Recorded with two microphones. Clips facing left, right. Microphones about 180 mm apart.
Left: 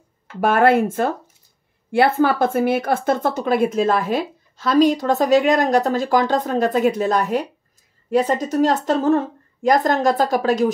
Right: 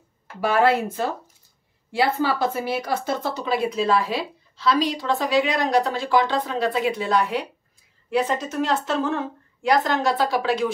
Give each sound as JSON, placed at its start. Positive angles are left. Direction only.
{"t": 0.4, "sound": "speech", "side_deg": 50}